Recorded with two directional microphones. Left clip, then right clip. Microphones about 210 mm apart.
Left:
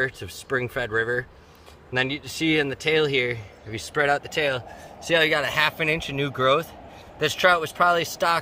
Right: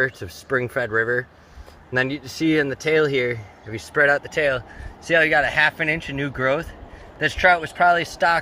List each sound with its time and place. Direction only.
0.0 s speech: 20° right (ahead or behind); by 8.3 s 5° left (ahead or behind)